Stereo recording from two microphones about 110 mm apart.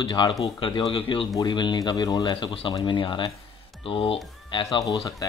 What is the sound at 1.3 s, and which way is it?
Speech, 45° left (ahead or behind).